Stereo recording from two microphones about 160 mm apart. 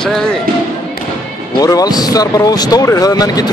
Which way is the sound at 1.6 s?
25° left (ahead or behind).